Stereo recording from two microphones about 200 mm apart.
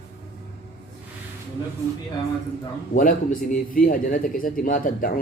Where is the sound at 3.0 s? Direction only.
45° left (ahead or behind).